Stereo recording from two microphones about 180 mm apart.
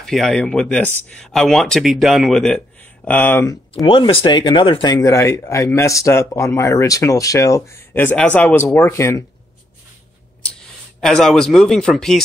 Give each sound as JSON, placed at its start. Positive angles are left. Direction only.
{"t": 0.0, "sound": "speech", "side_deg": 0}
{"t": 3.8, "sound": "speech", "side_deg": 30}
{"t": 11.0, "sound": "speech", "side_deg": 0}